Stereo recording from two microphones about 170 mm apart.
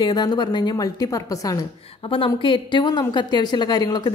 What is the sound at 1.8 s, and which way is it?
A woman's voice, 35° left (ahead or behind).